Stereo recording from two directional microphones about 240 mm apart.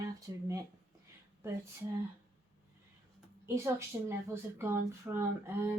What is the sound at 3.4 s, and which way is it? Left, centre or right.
A woman's voice, centre.